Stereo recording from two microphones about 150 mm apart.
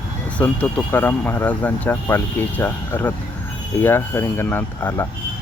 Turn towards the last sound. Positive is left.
turn(degrees=15)  # may be behind; listen again after turning